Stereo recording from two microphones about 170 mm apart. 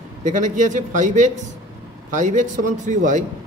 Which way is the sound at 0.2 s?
50° right (ahead or behind).